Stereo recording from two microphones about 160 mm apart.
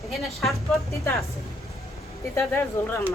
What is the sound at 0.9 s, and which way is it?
Speech, 15° left (ahead or behind).